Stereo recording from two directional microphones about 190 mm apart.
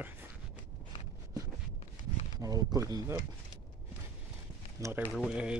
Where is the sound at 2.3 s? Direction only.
20° right (ahead or behind).